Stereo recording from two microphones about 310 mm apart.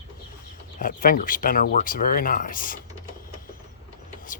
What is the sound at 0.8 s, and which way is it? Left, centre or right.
Speech, left.